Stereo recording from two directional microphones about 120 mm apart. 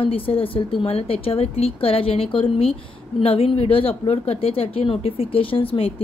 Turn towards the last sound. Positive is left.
turn(degrees=50)  # may be behind; listen again after turning